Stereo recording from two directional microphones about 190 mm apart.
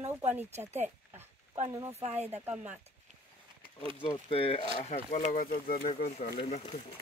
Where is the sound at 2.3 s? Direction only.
10° right (ahead or behind).